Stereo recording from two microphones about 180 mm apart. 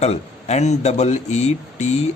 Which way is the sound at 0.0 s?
40° left (ahead or behind).